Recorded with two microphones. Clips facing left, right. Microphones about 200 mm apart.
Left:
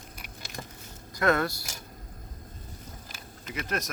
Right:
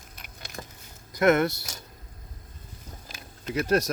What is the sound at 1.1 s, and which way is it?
Speech, 20° right (ahead or behind).